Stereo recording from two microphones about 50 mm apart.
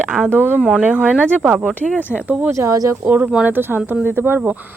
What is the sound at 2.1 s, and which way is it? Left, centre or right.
Speech, right.